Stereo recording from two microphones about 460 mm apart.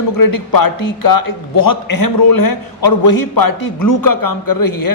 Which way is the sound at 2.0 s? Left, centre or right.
Left.